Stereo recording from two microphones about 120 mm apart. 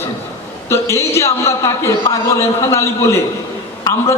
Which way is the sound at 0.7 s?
20° left (ahead or behind).